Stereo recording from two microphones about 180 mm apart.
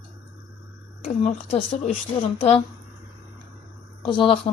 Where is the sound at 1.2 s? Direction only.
40° left (ahead or behind).